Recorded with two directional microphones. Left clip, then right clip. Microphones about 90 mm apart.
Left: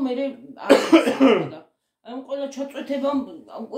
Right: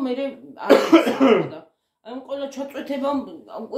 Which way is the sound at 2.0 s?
30° right (ahead or behind).